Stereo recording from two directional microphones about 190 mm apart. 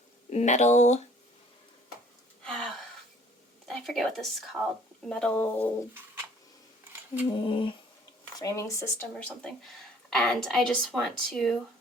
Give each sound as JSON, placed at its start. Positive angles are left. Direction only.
{"t": 0.3, "sound": "speech", "side_deg": 35}
{"t": 2.4, "sound": "gasp", "side_deg": 5}
{"t": 3.7, "sound": "speech", "side_deg": 0}
{"t": 7.3, "sound": "humming", "side_deg": 25}
{"t": 8.4, "sound": "speech", "side_deg": 15}